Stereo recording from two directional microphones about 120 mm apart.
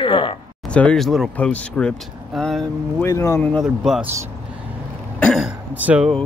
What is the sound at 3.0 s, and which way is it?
Speech, 25° left (ahead or behind).